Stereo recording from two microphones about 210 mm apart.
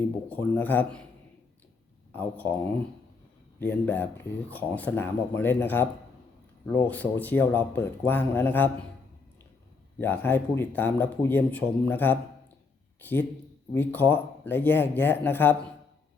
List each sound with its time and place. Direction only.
0.3 s speech: 10° left (ahead or behind)
2.1 s speech: 10° left (ahead or behind)
3.6 s speech: 10° left (ahead or behind)
10.0 s speech: 10° left (ahead or behind)